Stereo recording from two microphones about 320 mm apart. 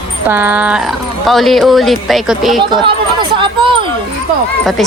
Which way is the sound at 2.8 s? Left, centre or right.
Centre.